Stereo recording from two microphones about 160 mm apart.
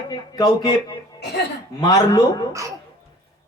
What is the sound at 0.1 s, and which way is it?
Speech, 25° left (ahead or behind).